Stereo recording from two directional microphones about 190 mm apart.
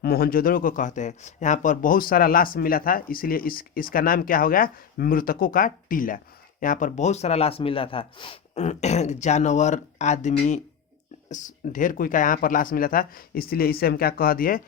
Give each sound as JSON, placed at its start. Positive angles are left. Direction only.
{"t": 0.0, "sound": "speech", "side_deg": 50}